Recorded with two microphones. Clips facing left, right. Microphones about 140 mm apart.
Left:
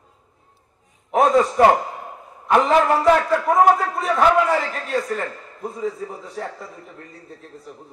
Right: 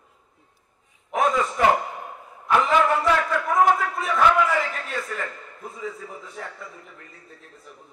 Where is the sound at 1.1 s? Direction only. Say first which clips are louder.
Left 6 dB; 35° left (ahead or behind).